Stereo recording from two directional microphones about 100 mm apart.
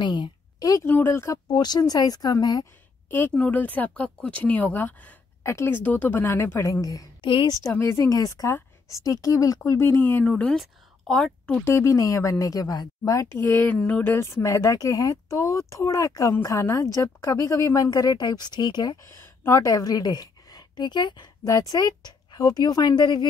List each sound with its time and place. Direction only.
0.0 s a sound: 50° left (ahead or behind)
0.8 s speech: 20° left (ahead or behind)
1.5 s speech: 45° left (ahead or behind)
3.1 s speech: 20° left (ahead or behind)
9.6 s speech: 25° left (ahead or behind)
10.6 s a woman's voice: centre (ahead or behind)
11.6 s speech: 30° left (ahead or behind)
13.5 s speech: 20° left (ahead or behind)
14.1 s speech: 30° left (ahead or behind)
17.8 s speech: 45° left (ahead or behind)
18.9 s speech: 25° left (ahead or behind)
19.6 s a woman's voice: 35° left (ahead or behind)
21.5 s speech: 35° left (ahead or behind)